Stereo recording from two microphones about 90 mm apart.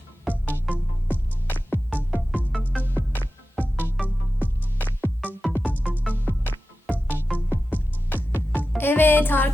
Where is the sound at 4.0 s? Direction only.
Centre (ahead or behind).